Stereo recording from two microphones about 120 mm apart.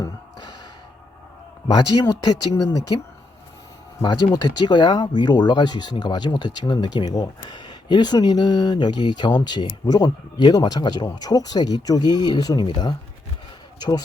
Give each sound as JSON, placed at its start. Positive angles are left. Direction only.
{"t": 0.0, "sound": "a sound", "side_deg": 35}
{"t": 1.6, "sound": "speech", "side_deg": 30}
{"t": 4.0, "sound": "speech", "side_deg": 40}